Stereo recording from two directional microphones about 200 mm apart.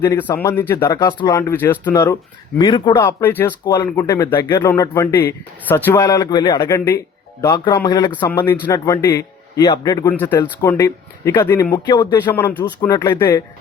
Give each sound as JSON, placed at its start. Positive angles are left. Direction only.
{"t": 0.0, "sound": "speech", "side_deg": 10}
{"t": 2.6, "sound": "speech", "side_deg": 20}